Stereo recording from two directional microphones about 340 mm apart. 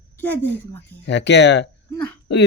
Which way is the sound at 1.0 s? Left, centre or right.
Left.